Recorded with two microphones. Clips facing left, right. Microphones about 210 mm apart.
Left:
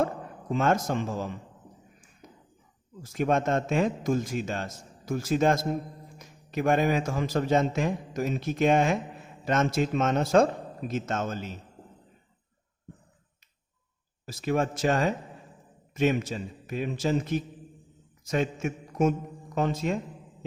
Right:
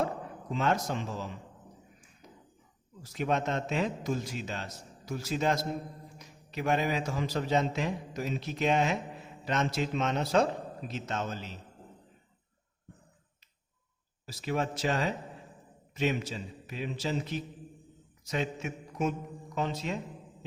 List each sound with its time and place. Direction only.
0.5 s a man's voice: 50° left (ahead or behind)
3.0 s a man's voice: 50° left (ahead or behind)
14.3 s a man's voice: 50° left (ahead or behind)